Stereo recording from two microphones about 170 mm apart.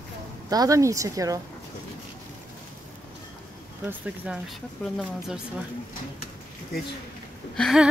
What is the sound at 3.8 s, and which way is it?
Speech, 5° right (ahead or behind).